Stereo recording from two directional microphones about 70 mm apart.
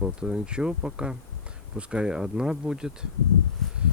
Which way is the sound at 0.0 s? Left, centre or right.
Centre.